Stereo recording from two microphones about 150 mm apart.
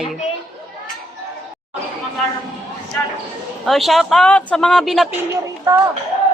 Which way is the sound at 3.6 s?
Centre (ahead or behind).